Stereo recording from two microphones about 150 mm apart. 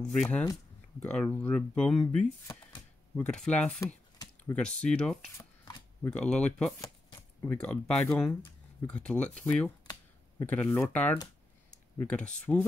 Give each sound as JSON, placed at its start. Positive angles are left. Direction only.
{"t": 0.1, "sound": "speech", "side_deg": 5}
{"t": 3.8, "sound": "computer keyboard", "side_deg": 20}
{"t": 4.6, "sound": "speech", "side_deg": 5}